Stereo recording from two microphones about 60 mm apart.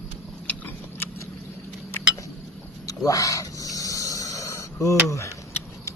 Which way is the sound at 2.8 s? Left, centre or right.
Left.